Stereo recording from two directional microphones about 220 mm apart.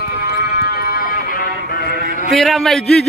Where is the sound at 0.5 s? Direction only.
45° left (ahead or behind).